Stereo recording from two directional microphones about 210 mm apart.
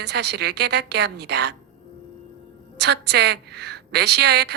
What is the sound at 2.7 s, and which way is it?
A woman's voice, 55° right (ahead or behind).